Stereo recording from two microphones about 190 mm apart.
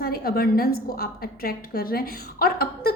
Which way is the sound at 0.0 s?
55° left (ahead or behind).